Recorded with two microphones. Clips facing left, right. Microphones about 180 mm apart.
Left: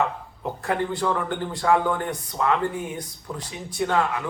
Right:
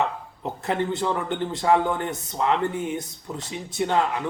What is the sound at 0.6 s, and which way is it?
A man's voice, 25° right (ahead or behind).